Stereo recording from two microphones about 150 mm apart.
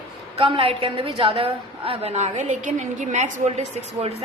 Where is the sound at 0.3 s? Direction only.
40° right (ahead or behind).